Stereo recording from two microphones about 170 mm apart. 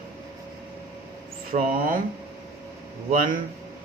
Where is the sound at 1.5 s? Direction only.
55° right (ahead or behind).